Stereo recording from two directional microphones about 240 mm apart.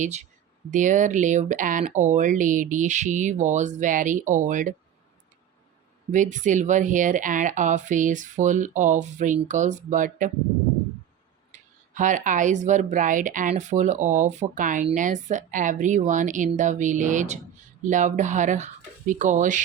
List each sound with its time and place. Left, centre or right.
0.0 s speech: right
6.1 s speech: right
11.5 s speech: right